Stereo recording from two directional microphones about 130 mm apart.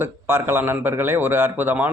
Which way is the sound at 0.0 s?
20° right (ahead or behind).